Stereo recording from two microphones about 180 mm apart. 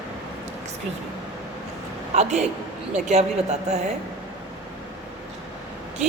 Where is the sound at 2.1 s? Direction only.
40° right (ahead or behind).